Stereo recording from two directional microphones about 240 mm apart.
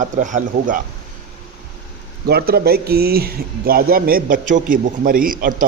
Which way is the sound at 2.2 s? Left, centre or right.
Right.